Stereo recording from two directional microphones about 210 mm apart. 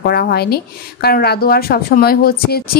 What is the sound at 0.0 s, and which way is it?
Speech, 50° left (ahead or behind).